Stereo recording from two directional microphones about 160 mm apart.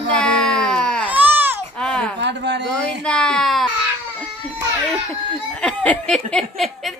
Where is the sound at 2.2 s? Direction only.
90° right.